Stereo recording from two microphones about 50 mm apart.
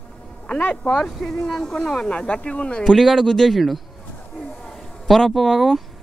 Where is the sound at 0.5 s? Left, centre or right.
Left.